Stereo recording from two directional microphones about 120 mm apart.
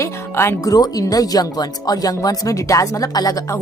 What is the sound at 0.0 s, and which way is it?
Speech, 25° left (ahead or behind).